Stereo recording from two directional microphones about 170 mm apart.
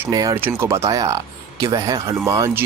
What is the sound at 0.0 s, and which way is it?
Speech, 20° right (ahead or behind).